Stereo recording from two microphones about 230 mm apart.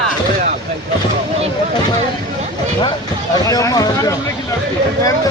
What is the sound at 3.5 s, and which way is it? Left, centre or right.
Speech, centre.